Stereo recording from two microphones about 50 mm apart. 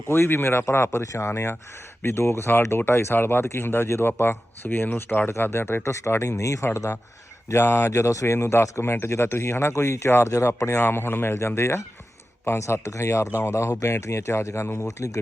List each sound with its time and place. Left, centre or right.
0.1 s speech: left
0.6 s speech: left
5.4 s speech: left
7.5 s speech: left
8.8 s speech: left
9.2 s speech: left
10.2 s speech: left
10.8 s speech: left
11.3 s speech: left
12.5 s speech: left
13.8 s speech: left